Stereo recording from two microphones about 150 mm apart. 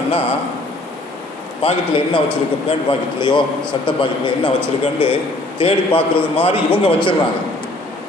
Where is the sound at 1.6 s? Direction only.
35° left (ahead or behind).